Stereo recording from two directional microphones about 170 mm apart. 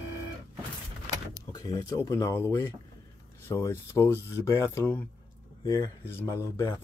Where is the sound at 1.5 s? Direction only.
20° left (ahead or behind).